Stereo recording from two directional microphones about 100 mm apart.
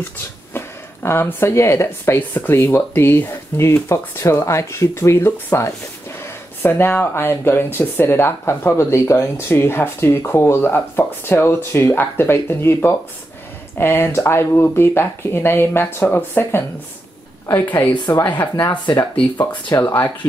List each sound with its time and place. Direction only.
0.5 s a woman's voice: 25° left (ahead or behind)
19.7 s speech: 30° left (ahead or behind)